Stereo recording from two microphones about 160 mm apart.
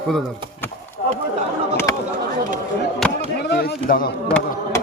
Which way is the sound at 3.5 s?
70° left (ahead or behind).